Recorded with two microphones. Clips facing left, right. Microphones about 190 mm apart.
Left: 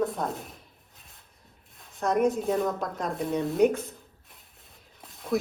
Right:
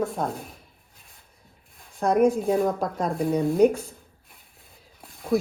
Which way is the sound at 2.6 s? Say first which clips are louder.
Right 4 dB; 50° right (ahead or behind).